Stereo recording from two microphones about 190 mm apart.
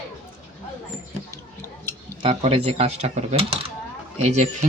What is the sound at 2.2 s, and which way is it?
Speech, 30° right (ahead or behind).